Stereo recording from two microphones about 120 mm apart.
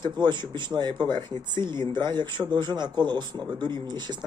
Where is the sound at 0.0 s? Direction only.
40° right (ahead or behind).